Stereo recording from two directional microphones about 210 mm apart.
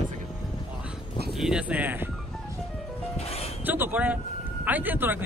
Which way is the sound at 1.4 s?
5° right (ahead or behind).